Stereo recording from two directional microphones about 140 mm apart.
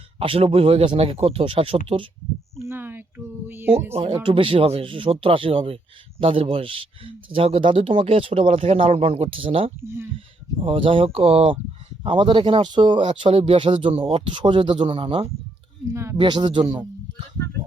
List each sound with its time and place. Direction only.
0.2 s speech: 40° right (ahead or behind)
2.6 s speech: 15° right (ahead or behind)
3.9 s a man's voice: 40° right (ahead or behind)
9.8 s speech: 15° right (ahead or behind)
10.6 s a man's voice: 40° right (ahead or behind)
15.9 s speech: 20° right (ahead or behind)
16.1 s a man's voice: 35° right (ahead or behind)